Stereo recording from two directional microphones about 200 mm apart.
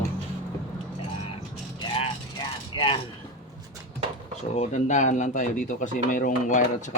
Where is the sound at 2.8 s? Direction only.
25° left (ahead or behind).